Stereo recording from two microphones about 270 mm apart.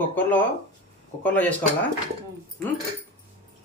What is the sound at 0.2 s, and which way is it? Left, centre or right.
Speech, centre.